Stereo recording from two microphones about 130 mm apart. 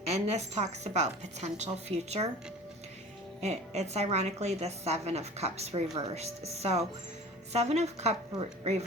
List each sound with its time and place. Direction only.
0.1 s a woman's voice: 60° right (ahead or behind)
3.4 s a woman's voice: 60° right (ahead or behind)